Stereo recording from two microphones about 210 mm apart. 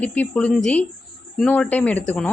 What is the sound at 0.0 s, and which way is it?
A woman's voice, 5° left (ahead or behind).